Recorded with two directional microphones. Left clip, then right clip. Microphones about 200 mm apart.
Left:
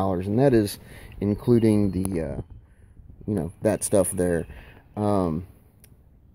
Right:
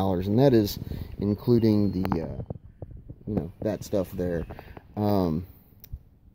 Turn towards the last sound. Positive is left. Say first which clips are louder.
# left 2 dB
turn(degrees=-5)  # may be behind; listen again after turning